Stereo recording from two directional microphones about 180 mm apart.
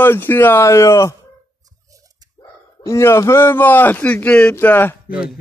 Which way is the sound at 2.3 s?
15° left (ahead or behind).